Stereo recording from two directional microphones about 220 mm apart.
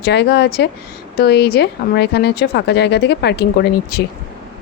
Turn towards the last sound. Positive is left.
turn(degrees=45)  # may be behind; listen again after turning